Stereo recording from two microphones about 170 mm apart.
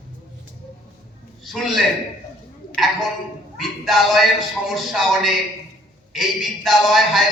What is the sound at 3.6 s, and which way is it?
A man's voice, centre (ahead or behind).